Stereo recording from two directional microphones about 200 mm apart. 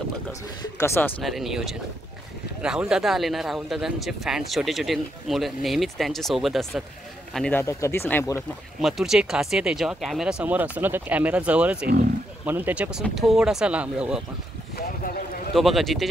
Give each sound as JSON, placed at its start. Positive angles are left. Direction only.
{"t": 0.3, "sound": "speech", "side_deg": 15}
{"t": 1.2, "sound": "speech", "side_deg": 0}
{"t": 8.8, "sound": "speech", "side_deg": 0}
{"t": 14.8, "sound": "a sound", "side_deg": 45}
{"t": 15.5, "sound": "speech", "side_deg": 0}